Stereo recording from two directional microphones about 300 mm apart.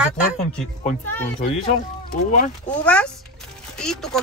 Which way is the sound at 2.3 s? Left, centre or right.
Left.